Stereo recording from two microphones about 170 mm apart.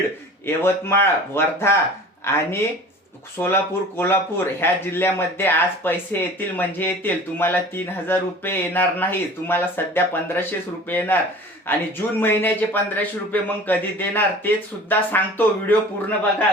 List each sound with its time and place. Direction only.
0.4 s speech: 15° left (ahead or behind)